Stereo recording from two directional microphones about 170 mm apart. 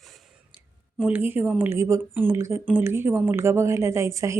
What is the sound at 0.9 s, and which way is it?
A woman's voice, 10° right (ahead or behind).